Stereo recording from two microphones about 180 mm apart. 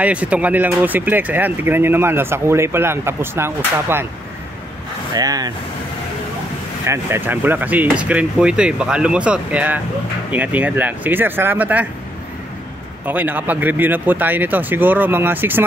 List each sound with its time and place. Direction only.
0.0 s speech: 10° right (ahead or behind)
5.1 s speech: 20° right (ahead or behind)
6.9 s speech: 15° right (ahead or behind)
13.0 s speech: 10° right (ahead or behind)